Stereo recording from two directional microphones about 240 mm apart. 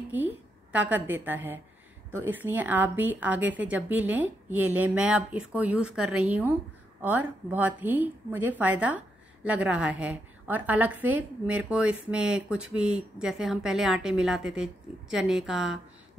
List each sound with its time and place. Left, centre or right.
0.1 s a woman's voice: centre